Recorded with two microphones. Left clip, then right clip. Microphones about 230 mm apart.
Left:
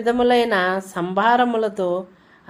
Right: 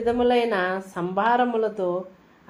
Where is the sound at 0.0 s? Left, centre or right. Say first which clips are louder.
Left 4 dB; left.